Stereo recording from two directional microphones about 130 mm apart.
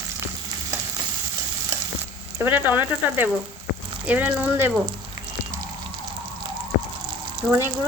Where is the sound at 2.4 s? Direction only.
15° right (ahead or behind).